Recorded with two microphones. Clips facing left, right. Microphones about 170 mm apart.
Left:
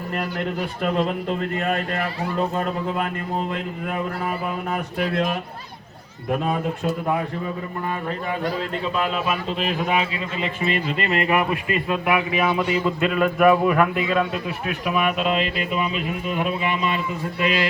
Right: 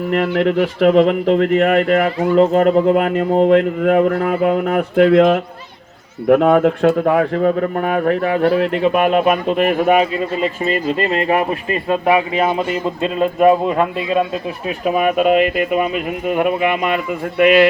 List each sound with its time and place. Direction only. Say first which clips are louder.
0.1 s a man's voice: right 11 dB; 90° right
6.2 s a man's voice: right 12 dB; 70° right (ahead or behind); by 14.2 s 25° right (ahead or behind)
14.8 s speech: right 8 dB; 45° right (ahead or behind); by 17.7 s 60° right (ahead or behind)